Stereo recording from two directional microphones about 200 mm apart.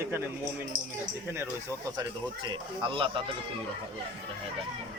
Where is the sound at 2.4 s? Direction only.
25° right (ahead or behind).